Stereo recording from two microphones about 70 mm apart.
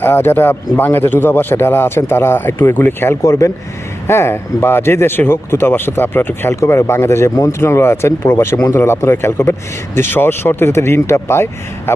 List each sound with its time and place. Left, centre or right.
0.0 s speech: left
4.0 s speech: left
6.6 s speech: left